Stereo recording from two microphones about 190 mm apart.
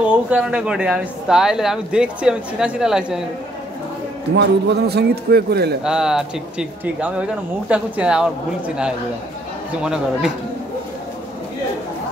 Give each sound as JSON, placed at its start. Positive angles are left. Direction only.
{"t": 0.3, "sound": "speech", "side_deg": -5}
{"t": 4.4, "sound": "a man's voice", "side_deg": -60}
{"t": 5.9, "sound": "speech", "side_deg": -5}